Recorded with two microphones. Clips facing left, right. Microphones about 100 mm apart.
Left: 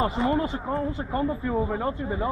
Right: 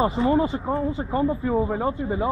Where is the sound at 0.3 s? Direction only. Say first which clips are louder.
Right 4 dB; 15° right (ahead or behind).